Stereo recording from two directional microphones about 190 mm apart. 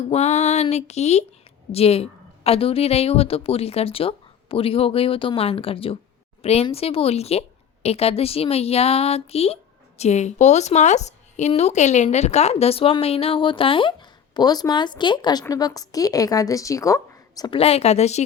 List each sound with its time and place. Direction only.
0.1 s a woman's voice: 35° left (ahead or behind)